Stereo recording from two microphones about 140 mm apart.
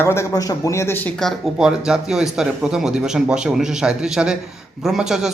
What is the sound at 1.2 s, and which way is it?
Speech, centre (ahead or behind).